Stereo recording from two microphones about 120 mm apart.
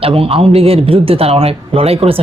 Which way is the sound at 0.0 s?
50° right (ahead or behind).